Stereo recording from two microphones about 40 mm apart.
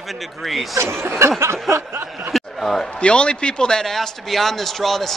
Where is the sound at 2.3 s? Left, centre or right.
Centre.